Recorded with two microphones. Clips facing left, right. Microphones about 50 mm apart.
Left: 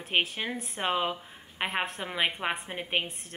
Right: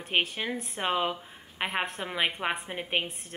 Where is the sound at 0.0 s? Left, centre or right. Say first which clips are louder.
Even; centre.